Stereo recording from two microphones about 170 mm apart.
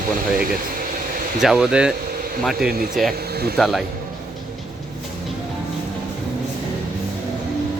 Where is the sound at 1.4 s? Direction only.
5° right (ahead or behind).